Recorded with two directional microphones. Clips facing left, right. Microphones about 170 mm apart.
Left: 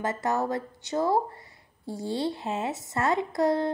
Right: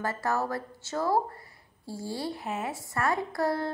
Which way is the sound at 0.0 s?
20° left (ahead or behind).